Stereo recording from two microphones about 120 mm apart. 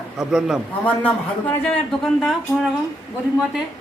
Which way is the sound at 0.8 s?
15° left (ahead or behind).